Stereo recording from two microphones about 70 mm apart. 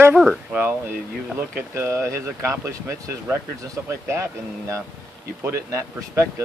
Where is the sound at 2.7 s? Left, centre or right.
Right.